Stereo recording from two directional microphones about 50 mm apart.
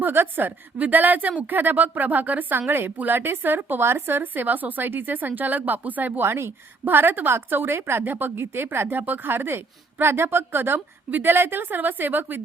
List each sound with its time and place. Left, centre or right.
0.0 s a woman's voice: right
6.2 s a woman's voice: right
6.8 s a woman's voice: right